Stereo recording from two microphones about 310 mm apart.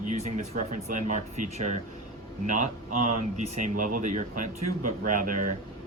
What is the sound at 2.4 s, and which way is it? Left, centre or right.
A man's voice, right.